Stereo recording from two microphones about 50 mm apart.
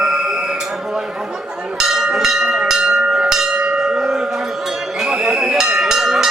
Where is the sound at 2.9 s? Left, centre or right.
Right.